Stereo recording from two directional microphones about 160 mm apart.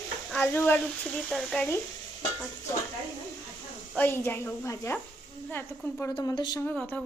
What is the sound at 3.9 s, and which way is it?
A woman's voice, 10° left (ahead or behind).